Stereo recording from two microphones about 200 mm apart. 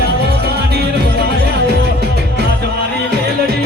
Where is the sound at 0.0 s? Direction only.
50° right (ahead or behind).